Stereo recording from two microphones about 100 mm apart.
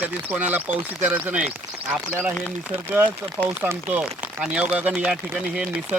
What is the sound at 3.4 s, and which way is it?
Speech, 20° right (ahead or behind).